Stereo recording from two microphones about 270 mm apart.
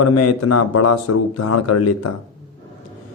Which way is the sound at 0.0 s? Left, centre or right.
Left.